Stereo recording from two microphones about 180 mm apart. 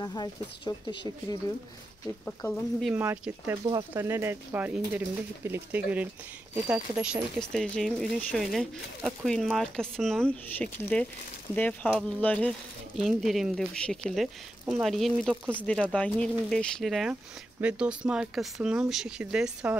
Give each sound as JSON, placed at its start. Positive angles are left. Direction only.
{"t": 0.0, "sound": "speech", "side_deg": 25}
{"t": 2.2, "sound": "speech", "side_deg": 10}
{"t": 2.8, "sound": "speech", "side_deg": -10}